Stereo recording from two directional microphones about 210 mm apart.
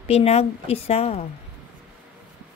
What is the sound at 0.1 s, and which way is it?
Speech, 30° left (ahead or behind).